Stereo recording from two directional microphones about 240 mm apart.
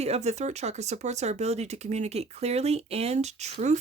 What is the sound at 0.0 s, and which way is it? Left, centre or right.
Speech, right.